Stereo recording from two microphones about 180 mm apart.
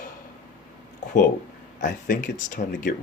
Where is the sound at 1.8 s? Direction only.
50° left (ahead or behind).